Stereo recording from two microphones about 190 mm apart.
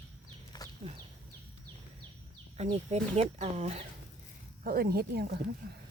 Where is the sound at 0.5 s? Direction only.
20° left (ahead or behind).